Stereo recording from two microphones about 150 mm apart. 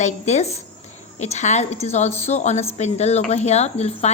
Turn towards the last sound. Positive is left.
turn(degrees=45)  # may be behind; listen again after turning